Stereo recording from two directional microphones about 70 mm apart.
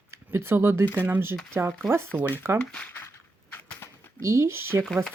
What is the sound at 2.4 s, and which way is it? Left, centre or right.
Speech, right.